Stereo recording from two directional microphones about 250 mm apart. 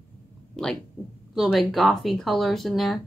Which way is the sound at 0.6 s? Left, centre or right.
Centre.